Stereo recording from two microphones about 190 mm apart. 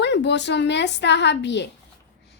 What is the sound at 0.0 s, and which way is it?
A woman's voice, 65° left (ahead or behind).